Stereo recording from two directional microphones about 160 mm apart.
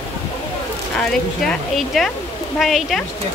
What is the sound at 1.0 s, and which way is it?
Speech, 5° left (ahead or behind).